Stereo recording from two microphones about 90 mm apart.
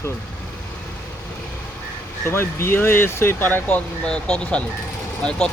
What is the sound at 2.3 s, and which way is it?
Speech, 30° left (ahead or behind).